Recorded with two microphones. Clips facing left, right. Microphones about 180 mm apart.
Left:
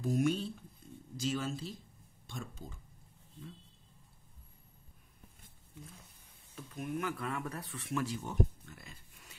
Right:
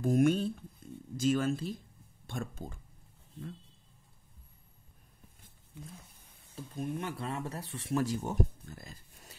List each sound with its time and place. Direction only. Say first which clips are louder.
0.0 s speech: right 5 dB; 50° right (ahead or behind)
6.5 s speech: right 2 dB; 30° right (ahead or behind)